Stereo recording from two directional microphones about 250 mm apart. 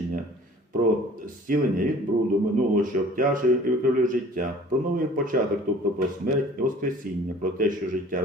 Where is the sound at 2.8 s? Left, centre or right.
Right.